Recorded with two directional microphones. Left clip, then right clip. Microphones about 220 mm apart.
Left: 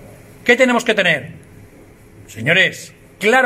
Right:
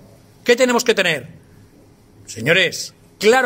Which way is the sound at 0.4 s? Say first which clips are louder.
Left 2 dB; 55° right (ahead or behind).